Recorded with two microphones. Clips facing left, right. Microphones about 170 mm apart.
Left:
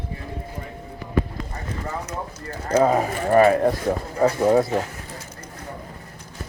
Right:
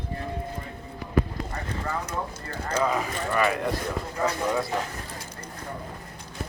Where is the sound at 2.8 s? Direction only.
45° left (ahead or behind).